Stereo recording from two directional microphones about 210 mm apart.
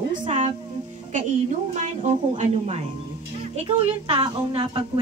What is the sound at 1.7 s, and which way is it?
A woman's voice, 35° right (ahead or behind).